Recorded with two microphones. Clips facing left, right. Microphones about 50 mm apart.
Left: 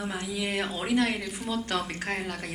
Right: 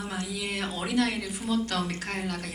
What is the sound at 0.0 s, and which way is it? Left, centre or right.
A woman's voice, left.